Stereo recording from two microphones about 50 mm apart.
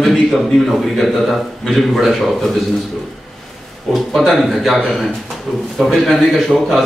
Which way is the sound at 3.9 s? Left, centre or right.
Centre.